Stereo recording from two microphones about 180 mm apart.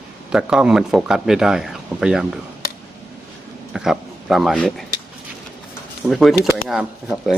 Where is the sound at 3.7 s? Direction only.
Centre (ahead or behind).